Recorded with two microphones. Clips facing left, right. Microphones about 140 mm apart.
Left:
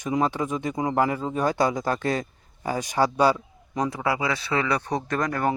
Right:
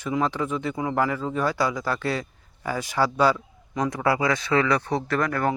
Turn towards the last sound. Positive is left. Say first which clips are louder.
# right 1 dB
turn(degrees=20)  # may be behind; listen again after turning